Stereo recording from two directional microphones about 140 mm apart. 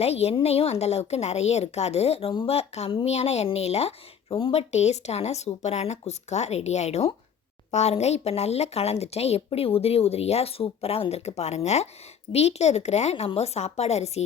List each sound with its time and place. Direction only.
0.0 s a woman's voice: 50° left (ahead or behind)
4.7 s a woman's voice: 50° left (ahead or behind)